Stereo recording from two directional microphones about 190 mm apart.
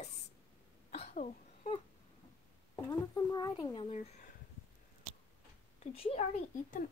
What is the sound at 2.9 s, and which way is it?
Speech, 20° left (ahead or behind).